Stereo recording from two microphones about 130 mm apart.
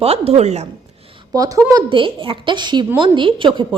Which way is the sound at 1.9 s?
40° right (ahead or behind).